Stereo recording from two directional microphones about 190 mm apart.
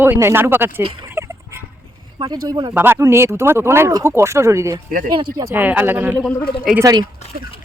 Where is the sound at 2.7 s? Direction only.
10° right (ahead or behind).